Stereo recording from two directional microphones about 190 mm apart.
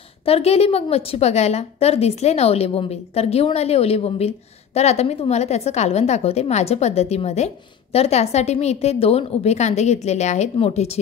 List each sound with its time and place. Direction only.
0.2 s a woman's voice: 30° left (ahead or behind)